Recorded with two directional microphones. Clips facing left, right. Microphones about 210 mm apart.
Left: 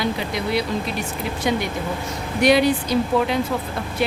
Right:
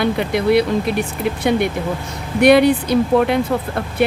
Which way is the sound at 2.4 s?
60° right (ahead or behind).